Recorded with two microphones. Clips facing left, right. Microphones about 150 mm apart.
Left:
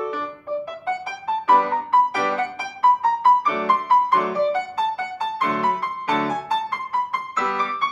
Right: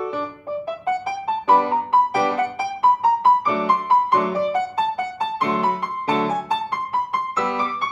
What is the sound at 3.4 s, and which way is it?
Music, 30° right (ahead or behind).